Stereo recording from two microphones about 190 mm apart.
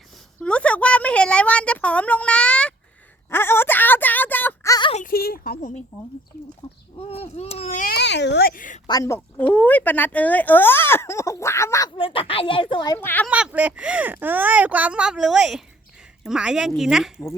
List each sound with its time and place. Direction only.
0.3 s speech: 5° left (ahead or behind)
3.2 s a sound: 10° left (ahead or behind)
5.0 s speech: 50° left (ahead or behind)
7.0 s speech: 30° left (ahead or behind)
7.9 s a child's voice: 60° left (ahead or behind); by 8.8 s 45° left (ahead or behind)
8.9 s speech: 15° left (ahead or behind)
11.9 s a woman's voice: 30° left (ahead or behind); by 13.2 s 10° left (ahead or behind)
13.2 s speech: 5° right (ahead or behind)